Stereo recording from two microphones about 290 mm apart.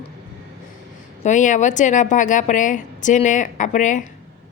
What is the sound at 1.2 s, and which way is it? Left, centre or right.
A woman's voice, left.